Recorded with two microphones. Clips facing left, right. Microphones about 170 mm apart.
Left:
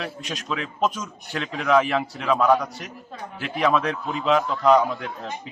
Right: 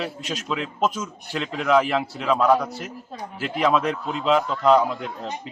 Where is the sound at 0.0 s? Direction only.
5° right (ahead or behind).